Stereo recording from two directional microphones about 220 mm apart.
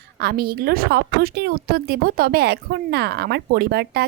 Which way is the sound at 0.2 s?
45° right (ahead or behind).